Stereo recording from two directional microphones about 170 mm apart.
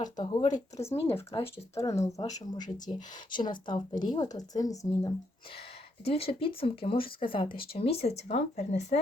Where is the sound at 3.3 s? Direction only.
25° left (ahead or behind).